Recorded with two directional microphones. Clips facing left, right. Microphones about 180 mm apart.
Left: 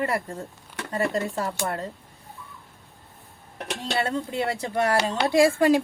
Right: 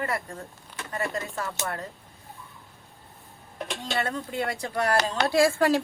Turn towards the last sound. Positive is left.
turn(degrees=20)  # may be behind; listen again after turning